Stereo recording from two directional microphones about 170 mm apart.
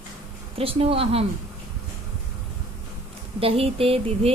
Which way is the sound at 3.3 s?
35° right (ahead or behind).